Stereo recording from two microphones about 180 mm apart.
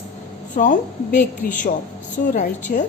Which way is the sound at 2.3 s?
50° left (ahead or behind).